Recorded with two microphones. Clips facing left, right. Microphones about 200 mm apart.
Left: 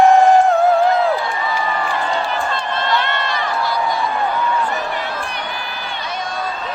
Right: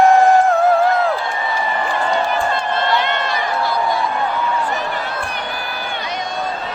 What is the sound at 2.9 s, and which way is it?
Run, 15° right (ahead or behind).